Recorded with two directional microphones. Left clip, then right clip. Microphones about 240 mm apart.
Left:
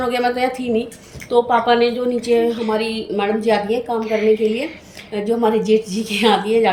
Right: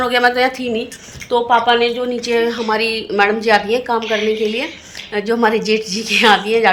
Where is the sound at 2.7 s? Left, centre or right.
Right.